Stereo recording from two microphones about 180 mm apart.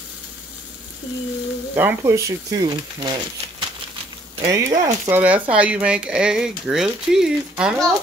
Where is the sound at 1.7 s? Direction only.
15° right (ahead or behind).